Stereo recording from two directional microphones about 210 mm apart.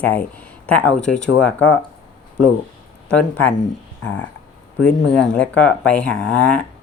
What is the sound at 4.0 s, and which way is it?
Speech, 70° left (ahead or behind).